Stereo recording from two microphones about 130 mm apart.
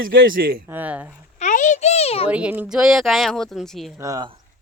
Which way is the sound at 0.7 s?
15° right (ahead or behind).